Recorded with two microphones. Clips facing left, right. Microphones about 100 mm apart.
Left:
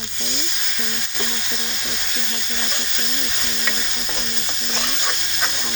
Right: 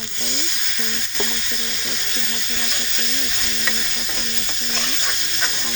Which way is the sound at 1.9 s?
15° left (ahead or behind).